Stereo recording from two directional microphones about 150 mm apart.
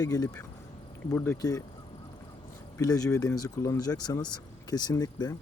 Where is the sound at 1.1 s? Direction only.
15° left (ahead or behind).